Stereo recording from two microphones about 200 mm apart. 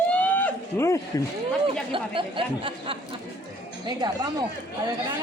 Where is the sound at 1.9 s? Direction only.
25° right (ahead or behind).